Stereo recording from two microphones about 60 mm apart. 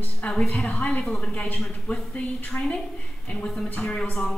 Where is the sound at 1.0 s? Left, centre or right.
Centre.